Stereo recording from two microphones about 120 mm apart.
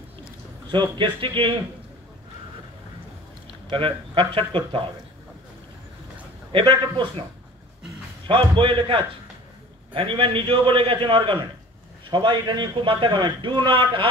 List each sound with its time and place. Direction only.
0.7 s a man's voice: 45° right (ahead or behind)
3.7 s a man's voice: 45° right (ahead or behind)
6.5 s a man's voice: 45° right (ahead or behind)
8.3 s a man's voice: 45° right (ahead or behind)